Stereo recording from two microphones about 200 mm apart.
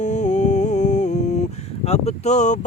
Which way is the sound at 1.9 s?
35° left (ahead or behind).